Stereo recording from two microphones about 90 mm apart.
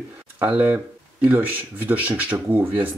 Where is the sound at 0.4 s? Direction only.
20° right (ahead or behind).